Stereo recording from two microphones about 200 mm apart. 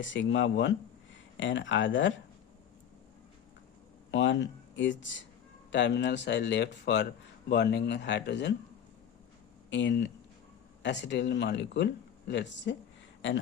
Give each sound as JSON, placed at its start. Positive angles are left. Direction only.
{"t": 0.0, "sound": "speech", "side_deg": 65}
{"t": 4.1, "sound": "speech", "side_deg": 65}
{"t": 9.6, "sound": "speech", "side_deg": 65}